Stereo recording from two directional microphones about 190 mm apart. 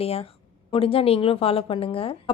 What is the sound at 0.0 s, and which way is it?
A woman's voice, 30° left (ahead or behind).